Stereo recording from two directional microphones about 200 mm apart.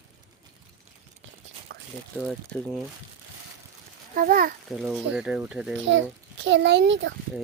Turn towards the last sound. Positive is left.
turn(degrees=-65)  # may be behind; listen again after turning